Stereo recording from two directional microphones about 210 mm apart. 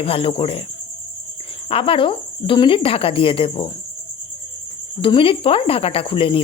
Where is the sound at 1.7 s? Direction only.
25° left (ahead or behind).